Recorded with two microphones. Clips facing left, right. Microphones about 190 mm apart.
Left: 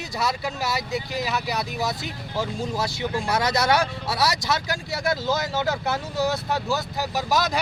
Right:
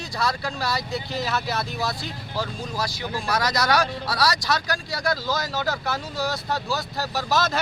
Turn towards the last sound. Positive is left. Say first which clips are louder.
# even
turn(degrees=15)  # may be behind; listen again after turning